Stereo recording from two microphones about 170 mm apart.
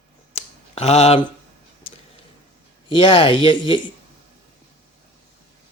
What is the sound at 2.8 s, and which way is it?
Speech, 30° left (ahead or behind).